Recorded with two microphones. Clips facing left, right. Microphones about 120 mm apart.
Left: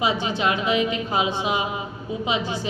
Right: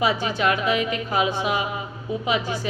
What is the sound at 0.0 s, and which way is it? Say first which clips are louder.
A woman's voice: right 1 dB; 25° left (ahead or behind).